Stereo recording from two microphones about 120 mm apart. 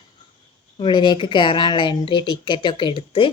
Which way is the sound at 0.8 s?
40° left (ahead or behind).